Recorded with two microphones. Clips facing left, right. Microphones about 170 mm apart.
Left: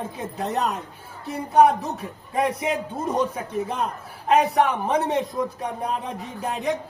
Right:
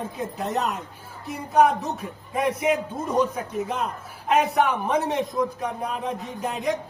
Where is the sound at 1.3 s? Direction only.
35° left (ahead or behind).